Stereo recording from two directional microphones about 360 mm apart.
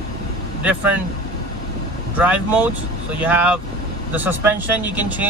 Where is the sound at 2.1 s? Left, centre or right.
Centre.